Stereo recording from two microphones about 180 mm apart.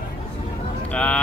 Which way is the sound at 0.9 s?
5° left (ahead or behind).